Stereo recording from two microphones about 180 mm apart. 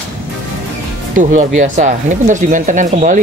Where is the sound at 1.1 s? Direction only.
45° right (ahead or behind).